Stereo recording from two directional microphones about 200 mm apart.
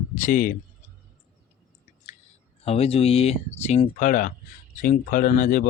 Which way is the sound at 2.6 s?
30° left (ahead or behind).